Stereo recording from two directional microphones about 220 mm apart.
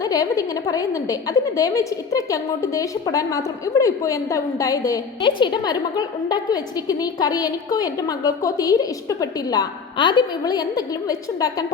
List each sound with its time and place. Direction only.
0.0 s a woman's voice: 15° left (ahead or behind)